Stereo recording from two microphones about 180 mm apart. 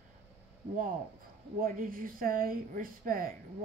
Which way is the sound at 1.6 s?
50° right (ahead or behind).